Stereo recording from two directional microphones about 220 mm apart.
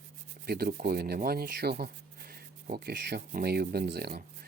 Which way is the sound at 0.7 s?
45° right (ahead or behind).